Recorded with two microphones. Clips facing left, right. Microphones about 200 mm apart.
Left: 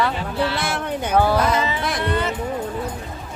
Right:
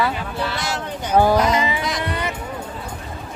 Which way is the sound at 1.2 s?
15° right (ahead or behind).